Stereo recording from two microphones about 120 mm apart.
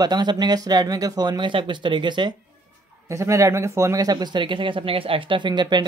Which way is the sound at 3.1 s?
25° right (ahead or behind).